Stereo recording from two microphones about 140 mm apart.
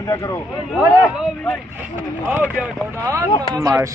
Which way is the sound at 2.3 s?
10° right (ahead or behind).